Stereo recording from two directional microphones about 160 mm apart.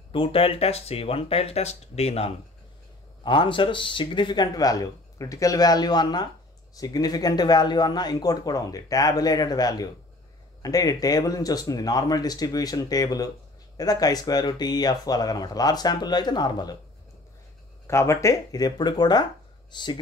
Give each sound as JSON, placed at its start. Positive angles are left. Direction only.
{"t": 0.1, "sound": "a man's voice", "side_deg": 35}
{"t": 17.8, "sound": "a man's voice", "side_deg": 15}